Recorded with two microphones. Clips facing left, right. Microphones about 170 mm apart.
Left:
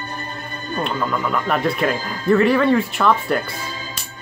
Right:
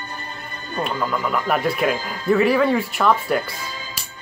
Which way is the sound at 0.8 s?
5° right (ahead or behind).